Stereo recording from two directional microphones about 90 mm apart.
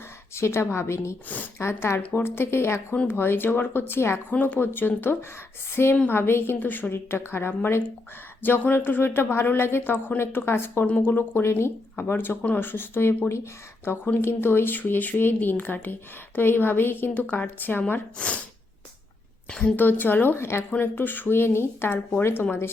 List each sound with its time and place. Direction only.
0.3 s a woman's voice: 30° left (ahead or behind)
1.3 s a woman's voice: 20° left (ahead or behind)
1.6 s a woman's voice: 30° left (ahead or behind)
2.0 s speech: 20° left (ahead or behind)
19.5 s a woman's voice: 10° left (ahead or behind)
19.7 s speech: 20° left (ahead or behind)